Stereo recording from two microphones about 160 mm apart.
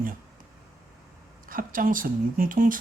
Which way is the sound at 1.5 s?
60° right (ahead or behind).